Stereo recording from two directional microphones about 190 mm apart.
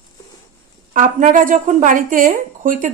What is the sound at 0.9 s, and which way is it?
A woman's voice, 45° right (ahead or behind).